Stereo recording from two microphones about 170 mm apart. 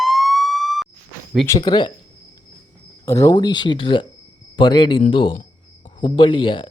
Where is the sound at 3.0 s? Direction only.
20° left (ahead or behind).